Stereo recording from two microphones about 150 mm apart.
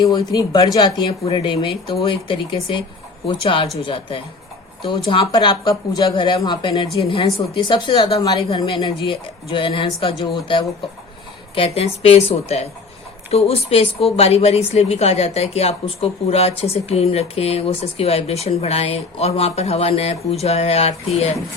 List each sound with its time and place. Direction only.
0.0 s speech: 30° left (ahead or behind)
4.9 s speech: 35° left (ahead or behind)
10.2 s speech: 25° left (ahead or behind)
11.5 s speech: 40° left (ahead or behind)